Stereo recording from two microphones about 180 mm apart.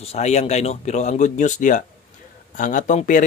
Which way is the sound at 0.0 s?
35° left (ahead or behind).